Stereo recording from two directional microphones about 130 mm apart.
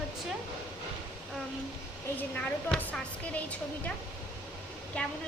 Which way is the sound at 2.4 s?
10° left (ahead or behind).